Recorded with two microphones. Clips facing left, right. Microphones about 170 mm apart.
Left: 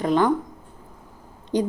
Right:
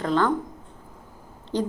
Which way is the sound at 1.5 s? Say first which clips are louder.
Left 3 dB; 15° left (ahead or behind).